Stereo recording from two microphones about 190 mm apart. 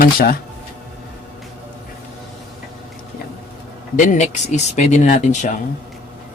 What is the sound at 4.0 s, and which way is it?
Speech, 40° left (ahead or behind).